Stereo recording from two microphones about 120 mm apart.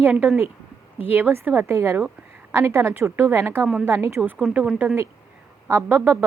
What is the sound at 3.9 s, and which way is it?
A woman's voice, 20° right (ahead or behind).